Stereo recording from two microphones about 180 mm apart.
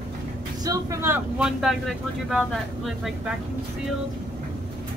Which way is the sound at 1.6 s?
Centre (ahead or behind).